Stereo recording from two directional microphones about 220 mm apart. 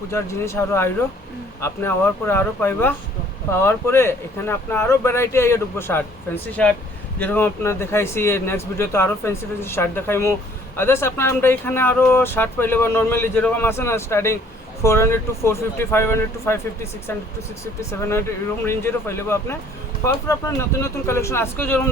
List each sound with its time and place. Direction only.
0.1 s speech: 10° left (ahead or behind)